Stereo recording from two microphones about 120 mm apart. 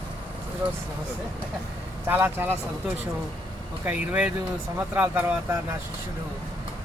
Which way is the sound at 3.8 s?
10° right (ahead or behind).